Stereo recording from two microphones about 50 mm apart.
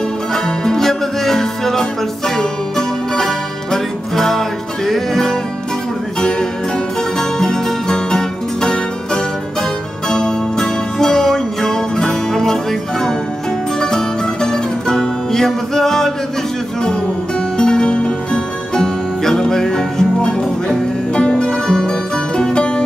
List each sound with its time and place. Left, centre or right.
0.3 s music: centre
7.0 s music: centre
13.7 s music: centre
17.6 s music: centre